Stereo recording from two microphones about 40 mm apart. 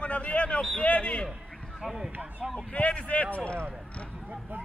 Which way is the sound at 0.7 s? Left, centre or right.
Left.